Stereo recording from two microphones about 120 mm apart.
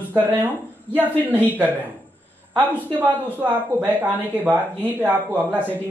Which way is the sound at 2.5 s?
15° right (ahead or behind).